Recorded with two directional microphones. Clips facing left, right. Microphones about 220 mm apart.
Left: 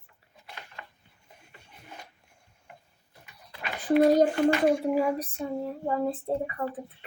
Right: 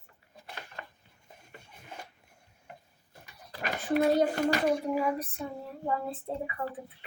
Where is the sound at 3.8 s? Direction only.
45° left (ahead or behind).